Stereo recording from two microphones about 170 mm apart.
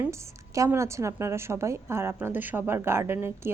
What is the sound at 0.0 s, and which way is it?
A woman's voice, 15° right (ahead or behind).